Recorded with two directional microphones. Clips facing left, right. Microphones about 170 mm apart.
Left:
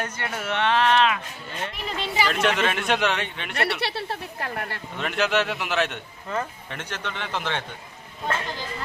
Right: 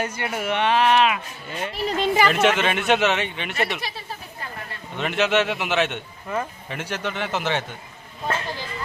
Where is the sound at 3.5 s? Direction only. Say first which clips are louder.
Left 2 dB; 70° left (ahead or behind).